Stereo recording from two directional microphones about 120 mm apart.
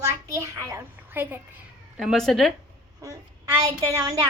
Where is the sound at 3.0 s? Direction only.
30° right (ahead or behind).